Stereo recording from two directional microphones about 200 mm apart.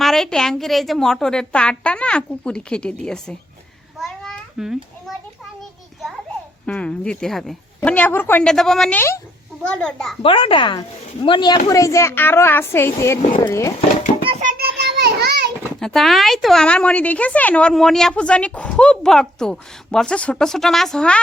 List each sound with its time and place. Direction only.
0.0 s a woman's voice: centre (ahead or behind)
3.9 s a sound: centre (ahead or behind)
6.7 s a woman's voice: 5° left (ahead or behind)
10.2 s speech: 25° left (ahead or behind)
13.2 s speech: 25° left (ahead or behind)
13.5 s speech: 15° left (ahead or behind)
14.3 s music: 35° right (ahead or behind)
14.5 s a sound: 55° right (ahead or behind)
15.8 s a woman's voice: centre (ahead or behind)